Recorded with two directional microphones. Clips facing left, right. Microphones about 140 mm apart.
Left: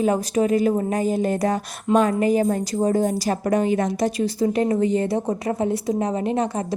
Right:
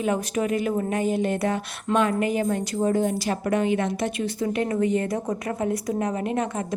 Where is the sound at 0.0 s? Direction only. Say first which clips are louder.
Left 5 dB; 35° left (ahead or behind).